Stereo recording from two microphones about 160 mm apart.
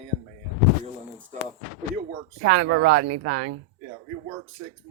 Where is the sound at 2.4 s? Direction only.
90° right.